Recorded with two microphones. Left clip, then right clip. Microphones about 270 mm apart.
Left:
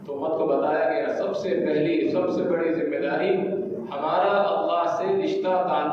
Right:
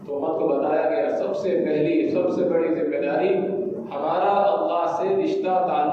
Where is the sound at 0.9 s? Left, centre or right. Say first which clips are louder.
Right 2 dB; centre.